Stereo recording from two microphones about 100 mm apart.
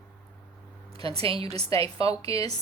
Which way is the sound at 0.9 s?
70° right (ahead or behind).